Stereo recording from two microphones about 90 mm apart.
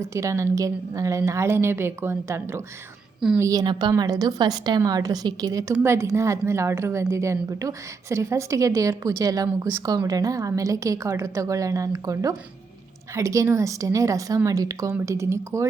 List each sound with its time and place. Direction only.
0.0 s a woman's voice: 35° right (ahead or behind)
3.5 s a woman's voice: 50° right (ahead or behind)
3.9 s a woman's voice: 40° right (ahead or behind)
5.8 s a woman's voice: 30° right (ahead or behind)